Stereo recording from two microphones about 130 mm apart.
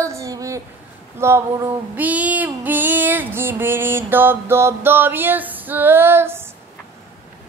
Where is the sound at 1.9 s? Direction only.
10° right (ahead or behind).